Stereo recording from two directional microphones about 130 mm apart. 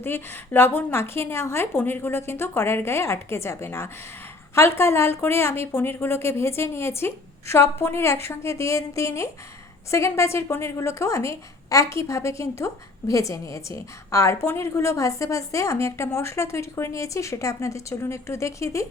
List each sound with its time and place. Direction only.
0.0 s a woman's voice: 15° left (ahead or behind)